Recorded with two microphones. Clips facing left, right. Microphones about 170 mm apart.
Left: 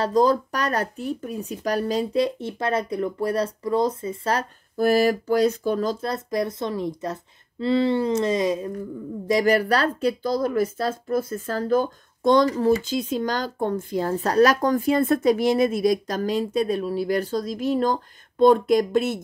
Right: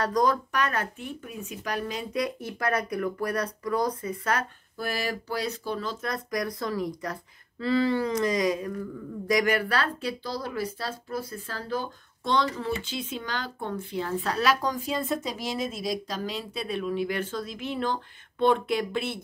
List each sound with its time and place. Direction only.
0.0 s speech: 30° left (ahead or behind)